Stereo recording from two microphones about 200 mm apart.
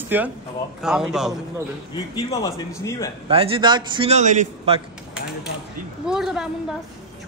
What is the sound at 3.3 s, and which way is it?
A man's voice, 25° right (ahead or behind).